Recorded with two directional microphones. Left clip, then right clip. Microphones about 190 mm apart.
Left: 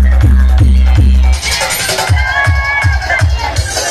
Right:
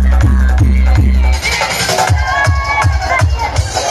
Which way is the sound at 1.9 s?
45° left (ahead or behind).